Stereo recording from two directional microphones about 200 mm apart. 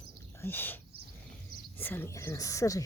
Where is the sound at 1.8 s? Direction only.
10° left (ahead or behind).